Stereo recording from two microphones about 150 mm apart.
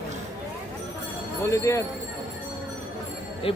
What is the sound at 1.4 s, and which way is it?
Speech, 20° left (ahead or behind).